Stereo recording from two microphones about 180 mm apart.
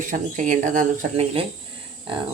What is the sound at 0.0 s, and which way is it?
Speech, 45° right (ahead or behind).